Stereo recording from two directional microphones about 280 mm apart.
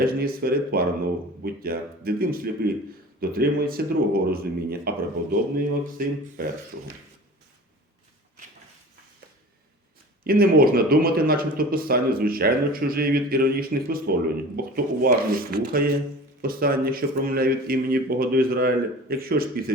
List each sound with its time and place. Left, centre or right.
0.0 s speech: right
10.2 s speech: right